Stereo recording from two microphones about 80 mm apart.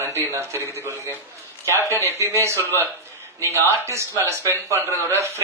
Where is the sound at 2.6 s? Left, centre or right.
Left.